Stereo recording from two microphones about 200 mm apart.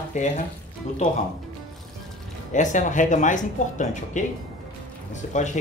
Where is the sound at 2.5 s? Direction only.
40° left (ahead or behind).